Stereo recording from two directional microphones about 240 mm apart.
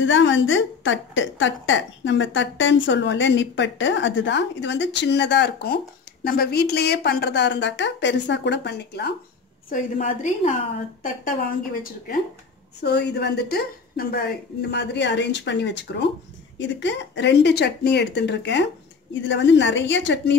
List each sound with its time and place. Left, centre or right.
0.0 s a woman's voice: left
9.7 s a woman's voice: left
12.8 s a woman's voice: left